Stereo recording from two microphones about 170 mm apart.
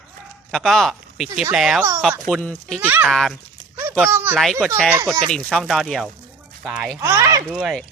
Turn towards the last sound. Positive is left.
turn(degrees=-5)  # may be behind; listen again after turning